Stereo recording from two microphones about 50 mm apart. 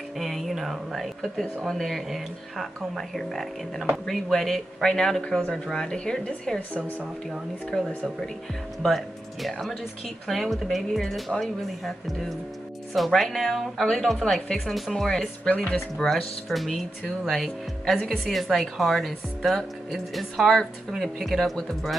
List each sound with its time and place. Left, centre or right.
0.2 s speech: centre
4.8 s speech: centre
8.8 s speech: centre
16.1 s speech: centre